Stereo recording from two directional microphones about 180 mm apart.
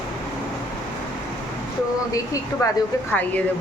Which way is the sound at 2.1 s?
20° left (ahead or behind).